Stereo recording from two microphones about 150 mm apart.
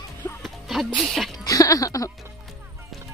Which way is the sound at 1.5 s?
25° left (ahead or behind).